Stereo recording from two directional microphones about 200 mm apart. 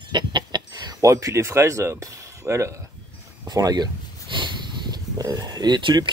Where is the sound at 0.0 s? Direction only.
25° right (ahead or behind).